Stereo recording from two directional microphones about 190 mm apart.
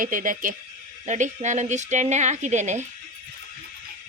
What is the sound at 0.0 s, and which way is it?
A woman's voice, 45° right (ahead or behind).